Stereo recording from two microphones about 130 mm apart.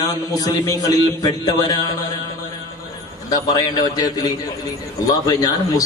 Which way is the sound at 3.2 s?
30° left (ahead or behind).